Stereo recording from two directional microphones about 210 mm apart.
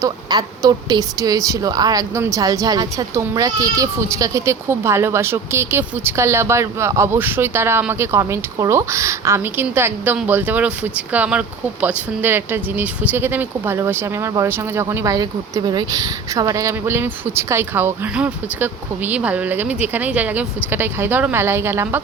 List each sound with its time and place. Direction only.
0.0 s a woman's voice: 15° right (ahead or behind)